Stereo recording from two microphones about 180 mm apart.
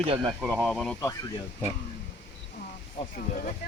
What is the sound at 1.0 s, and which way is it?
Speech, 20° left (ahead or behind).